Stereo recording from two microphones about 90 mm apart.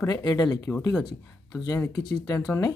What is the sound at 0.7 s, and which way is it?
Speech, 15° left (ahead or behind).